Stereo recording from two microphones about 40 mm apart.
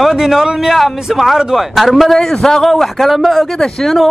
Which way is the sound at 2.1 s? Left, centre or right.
Centre.